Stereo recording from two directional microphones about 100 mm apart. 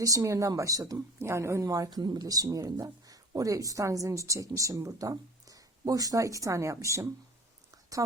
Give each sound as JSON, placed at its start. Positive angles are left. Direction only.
{"t": 0.0, "sound": "speech", "side_deg": -35}